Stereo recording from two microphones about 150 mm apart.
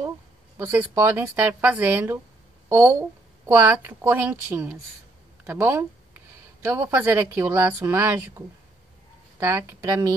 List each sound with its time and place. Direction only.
0.6 s a woman's voice: 15° right (ahead or behind)